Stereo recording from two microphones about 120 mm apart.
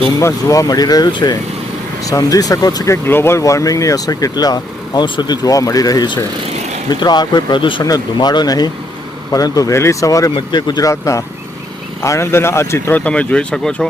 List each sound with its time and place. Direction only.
0.2 s speech: 25° left (ahead or behind)
13.1 s speech: 10° left (ahead or behind)